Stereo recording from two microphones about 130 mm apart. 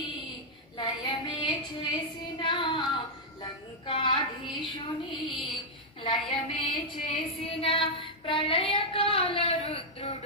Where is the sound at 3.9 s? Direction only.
40° left (ahead or behind).